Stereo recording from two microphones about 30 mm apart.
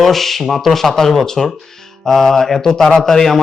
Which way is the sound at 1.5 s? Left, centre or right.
Centre.